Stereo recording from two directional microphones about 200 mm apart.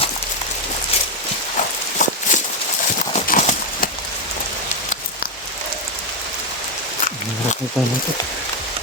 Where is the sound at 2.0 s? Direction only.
40° left (ahead or behind).